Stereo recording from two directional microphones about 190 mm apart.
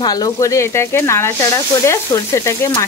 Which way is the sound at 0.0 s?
20° left (ahead or behind).